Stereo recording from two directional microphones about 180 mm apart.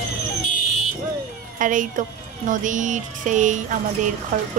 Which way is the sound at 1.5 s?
45° right (ahead or behind).